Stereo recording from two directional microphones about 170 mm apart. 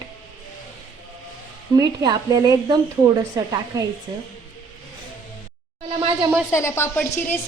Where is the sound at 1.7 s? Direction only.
20° right (ahead or behind).